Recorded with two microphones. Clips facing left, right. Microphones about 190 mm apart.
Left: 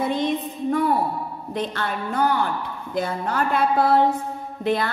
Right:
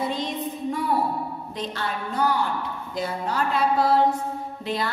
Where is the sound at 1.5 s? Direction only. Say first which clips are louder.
Left 6 dB; 55° left (ahead or behind).